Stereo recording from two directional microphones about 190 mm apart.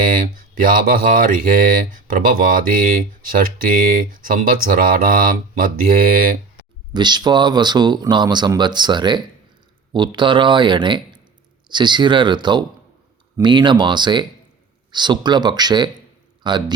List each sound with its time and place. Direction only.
0.0 s speech: 45° right (ahead or behind)
6.9 s speech: 25° right (ahead or behind)